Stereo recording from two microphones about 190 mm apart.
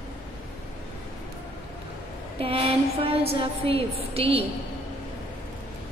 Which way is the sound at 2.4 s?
30° right (ahead or behind).